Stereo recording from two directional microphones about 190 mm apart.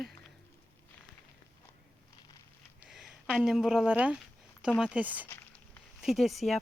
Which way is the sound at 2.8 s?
Centre (ahead or behind).